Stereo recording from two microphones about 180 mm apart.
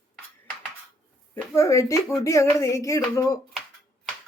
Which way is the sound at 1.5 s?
15° left (ahead or behind).